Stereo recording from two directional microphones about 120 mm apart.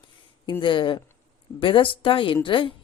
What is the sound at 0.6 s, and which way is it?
A woman's voice, 40° left (ahead or behind).